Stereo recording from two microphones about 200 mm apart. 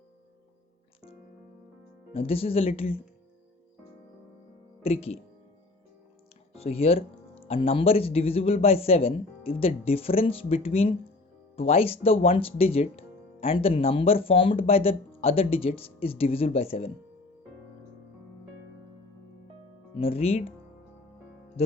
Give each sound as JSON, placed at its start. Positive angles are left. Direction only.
{"t": 2.1, "sound": "speech", "side_deg": 30}
{"t": 4.8, "sound": "speech", "side_deg": 30}
{"t": 6.5, "sound": "speech", "side_deg": 30}
{"t": 20.0, "sound": "speech", "side_deg": 30}